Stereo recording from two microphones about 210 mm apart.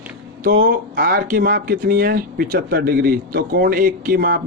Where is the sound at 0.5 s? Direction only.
50° right (ahead or behind).